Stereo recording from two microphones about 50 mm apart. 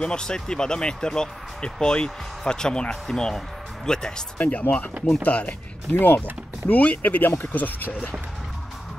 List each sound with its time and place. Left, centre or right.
0.0 s speech: centre
4.4 s speech: left
5.9 s speech: left